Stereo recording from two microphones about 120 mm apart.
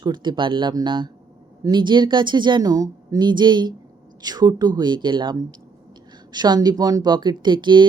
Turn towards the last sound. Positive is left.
turn(degrees=-40)  # may be behind; listen again after turning